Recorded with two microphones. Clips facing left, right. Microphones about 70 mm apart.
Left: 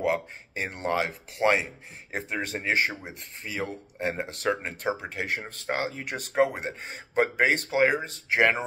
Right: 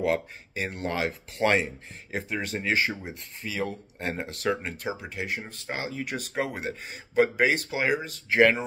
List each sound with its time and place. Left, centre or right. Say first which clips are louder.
0.0 s speech: even; left
2.9 s speech: right 2 dB; left
4.3 s speech: even; left
6.0 s speech: left 10 dB; left